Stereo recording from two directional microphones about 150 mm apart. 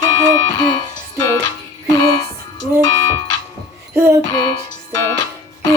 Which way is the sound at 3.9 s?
15° right (ahead or behind).